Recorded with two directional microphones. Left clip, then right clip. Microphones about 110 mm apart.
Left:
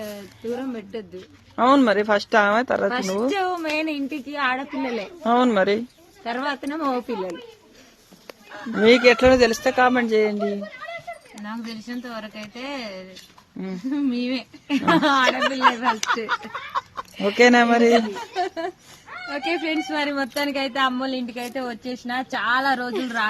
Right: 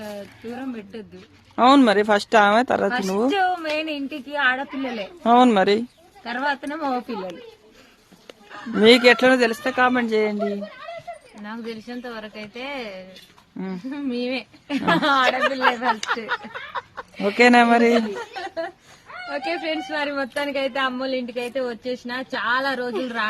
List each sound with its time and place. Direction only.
1.5 s speech: 45° right (ahead or behind)
2.9 s a woman's voice: 25° right (ahead or behind)
5.2 s speech: 50° right (ahead or behind)
6.2 s a woman's voice: 30° right (ahead or behind)
8.8 s a woman's voice: 40° right (ahead or behind)
9.1 s speech: 15° right (ahead or behind)
9.8 s speech: centre (ahead or behind)
11.4 s speech: 15° right (ahead or behind)
13.6 s a woman's voice: 40° right (ahead or behind)
13.9 s a woman's voice: 20° right (ahead or behind)
19.3 s a woman's voice: 25° right (ahead or behind)